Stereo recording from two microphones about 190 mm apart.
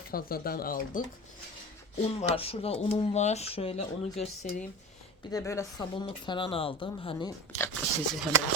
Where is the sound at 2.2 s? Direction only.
35° left (ahead or behind).